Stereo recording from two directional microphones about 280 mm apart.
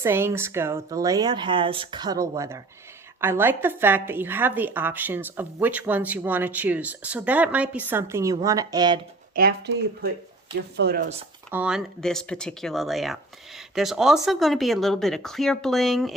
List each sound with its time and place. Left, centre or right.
0.0 s a woman's voice: centre
9.3 s speech: right
11.5 s speech: centre